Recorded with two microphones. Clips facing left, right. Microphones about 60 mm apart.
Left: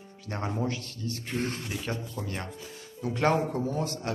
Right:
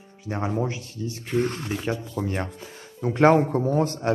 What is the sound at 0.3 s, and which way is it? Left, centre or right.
A man's voice, centre.